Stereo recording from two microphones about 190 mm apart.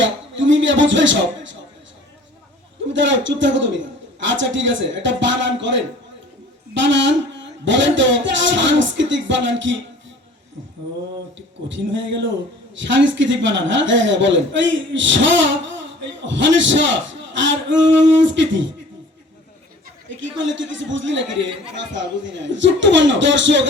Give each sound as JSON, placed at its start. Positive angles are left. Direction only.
{"t": 0.0, "sound": "speech", "side_deg": -75}
{"t": 2.9, "sound": "a woman's voice", "side_deg": -75}
{"t": 11.7, "sound": "a woman's voice", "side_deg": -75}
{"t": 20.1, "sound": "a woman's voice", "side_deg": -75}